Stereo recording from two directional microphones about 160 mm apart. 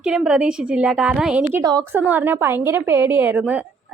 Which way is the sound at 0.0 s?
5° right (ahead or behind).